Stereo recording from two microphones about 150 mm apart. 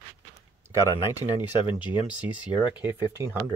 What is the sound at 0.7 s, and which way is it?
Speech, 20° right (ahead or behind).